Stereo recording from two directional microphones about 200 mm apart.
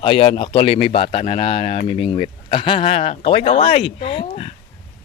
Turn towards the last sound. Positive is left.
turn(degrees=30)  # may be behind; listen again after turning